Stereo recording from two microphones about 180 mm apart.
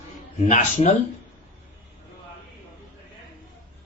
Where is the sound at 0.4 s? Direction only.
40° left (ahead or behind).